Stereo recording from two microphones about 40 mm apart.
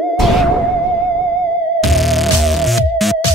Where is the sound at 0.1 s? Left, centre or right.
Centre.